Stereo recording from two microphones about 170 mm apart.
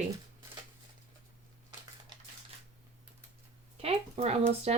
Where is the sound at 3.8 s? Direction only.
35° right (ahead or behind).